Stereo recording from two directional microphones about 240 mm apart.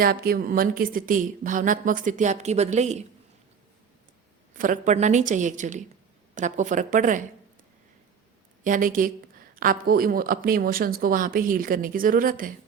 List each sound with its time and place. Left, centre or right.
0.0 s speech: right
4.5 s speech: right
8.6 s speech: right